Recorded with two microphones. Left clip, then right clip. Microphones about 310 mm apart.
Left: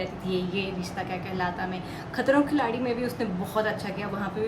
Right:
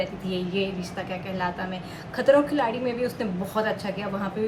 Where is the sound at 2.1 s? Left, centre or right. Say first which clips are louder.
Right 4 dB; centre.